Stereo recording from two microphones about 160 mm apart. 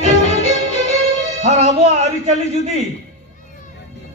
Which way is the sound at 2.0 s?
45° right (ahead or behind).